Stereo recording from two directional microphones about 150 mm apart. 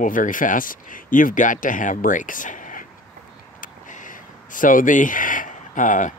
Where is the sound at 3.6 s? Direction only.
60° left (ahead or behind).